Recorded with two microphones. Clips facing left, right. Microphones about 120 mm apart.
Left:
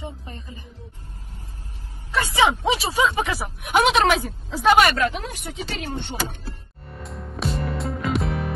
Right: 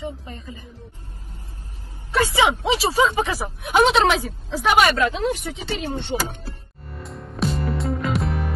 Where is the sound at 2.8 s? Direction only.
40° right (ahead or behind).